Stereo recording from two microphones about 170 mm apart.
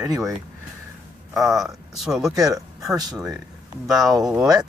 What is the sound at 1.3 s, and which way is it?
Speech, centre (ahead or behind).